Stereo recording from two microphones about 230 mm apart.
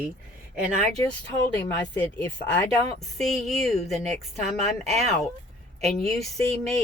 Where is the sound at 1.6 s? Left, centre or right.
Centre.